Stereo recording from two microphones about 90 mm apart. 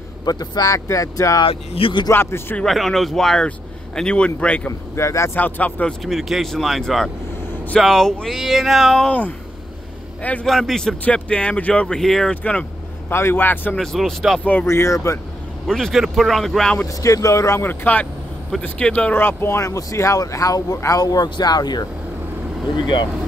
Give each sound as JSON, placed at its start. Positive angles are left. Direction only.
{"t": 0.2, "sound": "speech", "side_deg": 45}
{"t": 1.4, "sound": "speech", "side_deg": 80}
{"t": 2.0, "sound": "a man's voice", "side_deg": 25}
{"t": 2.6, "sound": "speech", "side_deg": 0}
{"t": 4.9, "sound": "speech", "side_deg": 30}
{"t": 5.3, "sound": "speech", "side_deg": 15}
{"t": 6.0, "sound": "speech", "side_deg": 0}
{"t": 10.4, "sound": "speech", "side_deg": 5}
{"t": 13.1, "sound": "a man's voice", "side_deg": 25}
{"t": 13.7, "sound": "speech", "side_deg": 0}
{"t": 14.4, "sound": "speech", "side_deg": 15}
{"t": 14.7, "sound": "speech", "side_deg": 30}
{"t": 15.6, "sound": "speech", "side_deg": 5}
{"t": 16.8, "sound": "speech", "side_deg": 35}